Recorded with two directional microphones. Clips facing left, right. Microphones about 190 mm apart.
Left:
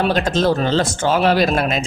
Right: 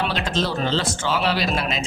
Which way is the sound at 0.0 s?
45° left (ahead or behind).